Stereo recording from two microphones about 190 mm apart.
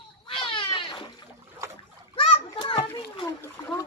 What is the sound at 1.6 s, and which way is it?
Splash, 15° right (ahead or behind).